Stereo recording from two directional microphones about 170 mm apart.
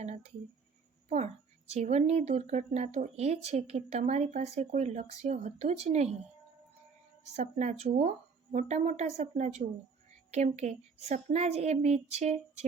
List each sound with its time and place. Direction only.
1.7 s speech: 40° right (ahead or behind)
7.3 s speech: 40° right (ahead or behind)